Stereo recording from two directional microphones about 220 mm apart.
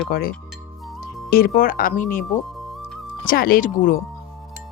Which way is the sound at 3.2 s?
40° left (ahead or behind).